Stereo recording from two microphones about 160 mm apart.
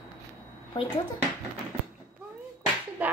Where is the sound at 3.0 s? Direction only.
10° right (ahead or behind).